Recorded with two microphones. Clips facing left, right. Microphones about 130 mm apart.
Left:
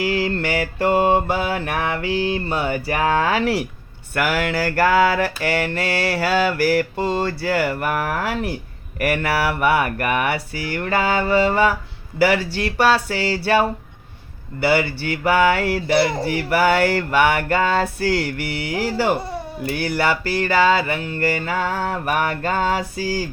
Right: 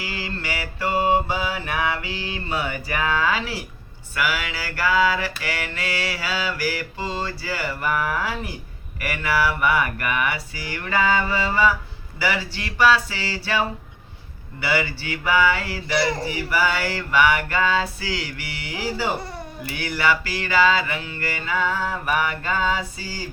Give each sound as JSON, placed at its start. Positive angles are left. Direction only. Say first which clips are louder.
{"t": 0.0, "sound": "mantra", "louder": "left 10 dB", "side_deg": 55}
{"t": 19.7, "sound": "mantra", "louder": "left 2 dB", "side_deg": 45}